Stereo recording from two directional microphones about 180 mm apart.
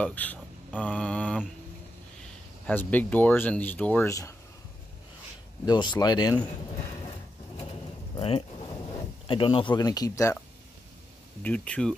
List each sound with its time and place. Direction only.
0.0 s speech: 10° left (ahead or behind)
2.6 s speech: 10° left (ahead or behind)
5.7 s speech: 25° left (ahead or behind)
8.2 s speech: 35° left (ahead or behind); by 10.4 s 15° left (ahead or behind)
11.4 s speech: 5° left (ahead or behind)